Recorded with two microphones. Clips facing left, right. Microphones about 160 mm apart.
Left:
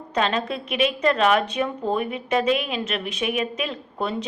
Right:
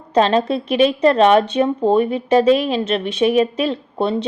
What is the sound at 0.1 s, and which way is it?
A woman's voice, 35° right (ahead or behind).